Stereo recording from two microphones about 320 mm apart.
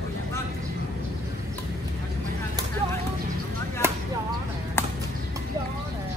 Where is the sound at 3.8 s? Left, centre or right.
Centre.